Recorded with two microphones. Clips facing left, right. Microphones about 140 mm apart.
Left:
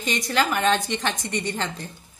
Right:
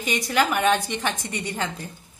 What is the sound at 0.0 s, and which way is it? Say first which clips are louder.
A woman's voice: right 1 dB; 10° right (ahead or behind).